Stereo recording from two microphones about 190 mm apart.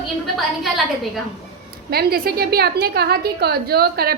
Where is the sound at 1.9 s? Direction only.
55° right (ahead or behind).